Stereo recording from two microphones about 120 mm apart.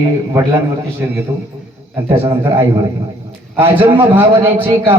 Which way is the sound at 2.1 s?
20° right (ahead or behind).